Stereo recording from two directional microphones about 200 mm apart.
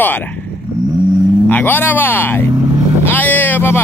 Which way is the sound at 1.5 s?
10° left (ahead or behind).